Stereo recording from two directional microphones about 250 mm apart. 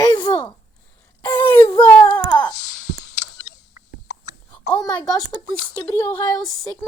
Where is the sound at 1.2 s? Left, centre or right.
Centre.